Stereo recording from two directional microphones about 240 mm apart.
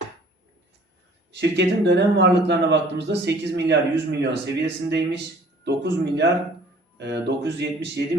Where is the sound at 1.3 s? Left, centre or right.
Right.